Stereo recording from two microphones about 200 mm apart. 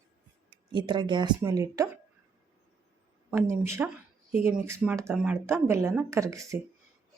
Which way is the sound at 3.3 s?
15° right (ahead or behind).